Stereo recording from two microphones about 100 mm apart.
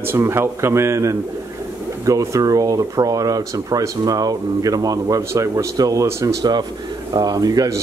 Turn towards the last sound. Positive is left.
turn(degrees=-40)  # may be behind; listen again after turning